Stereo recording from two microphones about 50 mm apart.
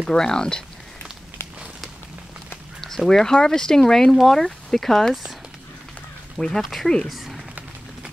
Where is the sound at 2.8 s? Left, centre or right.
Centre.